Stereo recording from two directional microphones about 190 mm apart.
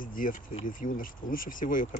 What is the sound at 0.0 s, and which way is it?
Speech, 45° left (ahead or behind).